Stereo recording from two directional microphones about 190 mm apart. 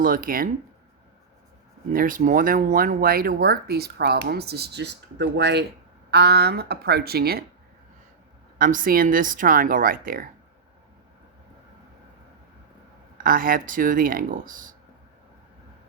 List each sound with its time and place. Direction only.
0.0 s speech: 45° right (ahead or behind)
1.9 s speech: 45° right (ahead or behind)
8.5 s speech: 45° right (ahead or behind)
13.1 s speech: 45° right (ahead or behind)